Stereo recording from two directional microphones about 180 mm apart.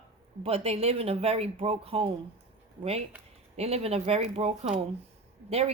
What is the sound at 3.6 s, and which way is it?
A woman's voice, 35° right (ahead or behind).